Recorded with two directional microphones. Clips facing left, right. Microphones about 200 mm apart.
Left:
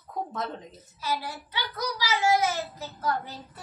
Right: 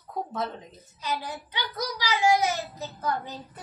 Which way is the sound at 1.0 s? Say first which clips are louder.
Even; 15° right (ahead or behind).